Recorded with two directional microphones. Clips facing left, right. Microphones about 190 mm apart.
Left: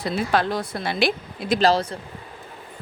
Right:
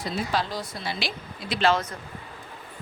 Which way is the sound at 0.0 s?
60° left (ahead or behind).